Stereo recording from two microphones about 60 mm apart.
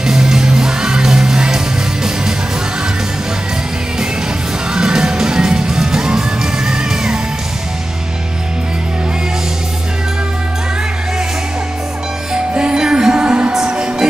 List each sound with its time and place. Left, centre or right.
0.0 s music: centre
4.7 s music: centre
12.5 s music: centre